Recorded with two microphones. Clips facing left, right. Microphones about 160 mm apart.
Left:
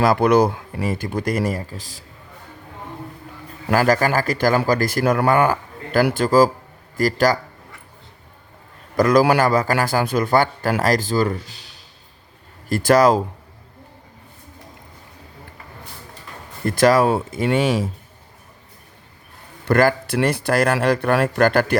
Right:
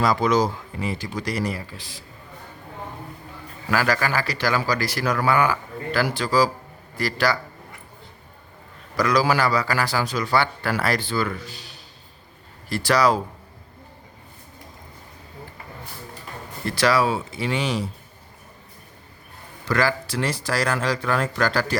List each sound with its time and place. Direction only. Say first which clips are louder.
0.0 s a man's voice: left 5 dB; 55° left (ahead or behind)
3.7 s a man's voice: left 5 dB; 45° left (ahead or behind)
9.0 s a man's voice: left 5 dB; 50° left (ahead or behind)
12.6 s a man's voice: left 5 dB; 50° left (ahead or behind)
16.6 s a man's voice: left 5 dB; 50° left (ahead or behind)
19.6 s a man's voice: left 6 dB; 50° left (ahead or behind)